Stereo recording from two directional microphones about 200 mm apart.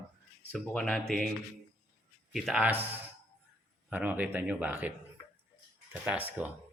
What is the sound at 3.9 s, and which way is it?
Speech, 10° right (ahead or behind).